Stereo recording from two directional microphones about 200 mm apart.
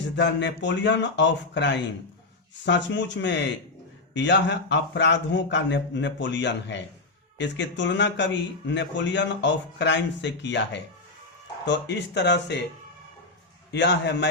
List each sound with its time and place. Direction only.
0.2 s a man's voice: 60° left (ahead or behind)
13.7 s a man's voice: 60° left (ahead or behind)